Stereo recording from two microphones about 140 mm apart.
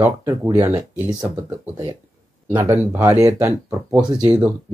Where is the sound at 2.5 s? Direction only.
15° right (ahead or behind).